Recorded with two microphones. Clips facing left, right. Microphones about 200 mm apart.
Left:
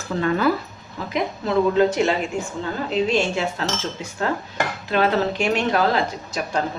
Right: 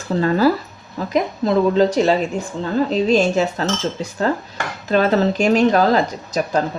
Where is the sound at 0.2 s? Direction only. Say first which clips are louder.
Right 4 dB; 35° right (ahead or behind).